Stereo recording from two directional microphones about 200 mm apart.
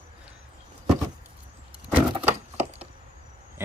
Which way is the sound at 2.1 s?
30° right (ahead or behind).